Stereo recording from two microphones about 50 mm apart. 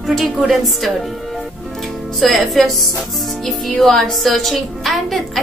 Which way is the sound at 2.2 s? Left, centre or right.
Centre.